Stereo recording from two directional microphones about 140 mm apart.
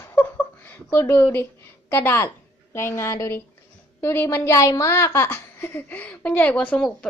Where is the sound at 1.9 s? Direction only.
15° left (ahead or behind).